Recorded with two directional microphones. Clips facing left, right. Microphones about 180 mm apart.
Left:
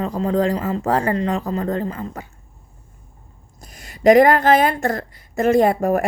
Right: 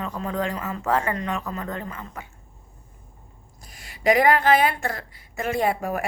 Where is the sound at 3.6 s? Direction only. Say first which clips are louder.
Left 9 dB; 45° left (ahead or behind).